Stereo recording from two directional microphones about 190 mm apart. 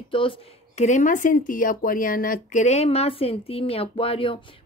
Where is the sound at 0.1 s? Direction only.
25° left (ahead or behind).